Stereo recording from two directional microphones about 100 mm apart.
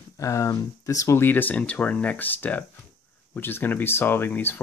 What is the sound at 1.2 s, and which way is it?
Speech, 20° left (ahead or behind).